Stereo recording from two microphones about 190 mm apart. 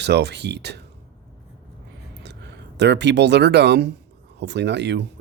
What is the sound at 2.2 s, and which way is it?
Speech, 65° right (ahead or behind).